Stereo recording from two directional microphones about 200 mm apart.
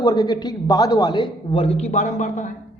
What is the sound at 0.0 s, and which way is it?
A man's voice, 20° left (ahead or behind).